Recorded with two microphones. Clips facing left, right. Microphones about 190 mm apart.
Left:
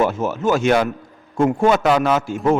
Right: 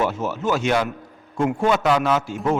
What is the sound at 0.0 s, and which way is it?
A man's voice, 50° left (ahead or behind).